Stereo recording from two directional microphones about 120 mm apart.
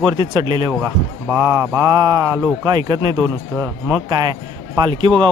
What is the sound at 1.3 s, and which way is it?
Speech, 25° right (ahead or behind).